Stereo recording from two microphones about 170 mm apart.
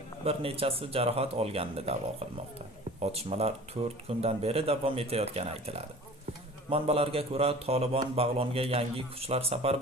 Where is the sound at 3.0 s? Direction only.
35° right (ahead or behind).